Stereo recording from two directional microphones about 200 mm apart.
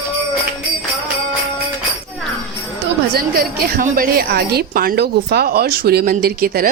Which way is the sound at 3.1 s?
50° right (ahead or behind).